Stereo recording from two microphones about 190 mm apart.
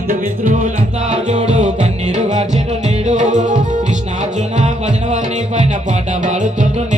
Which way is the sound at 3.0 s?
40° right (ahead or behind).